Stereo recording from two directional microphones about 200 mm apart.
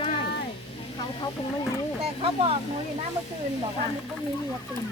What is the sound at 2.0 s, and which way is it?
Speech, 30° right (ahead or behind).